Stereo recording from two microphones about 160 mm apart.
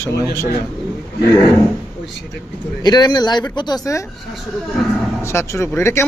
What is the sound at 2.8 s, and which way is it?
A man's voice, 25° left (ahead or behind).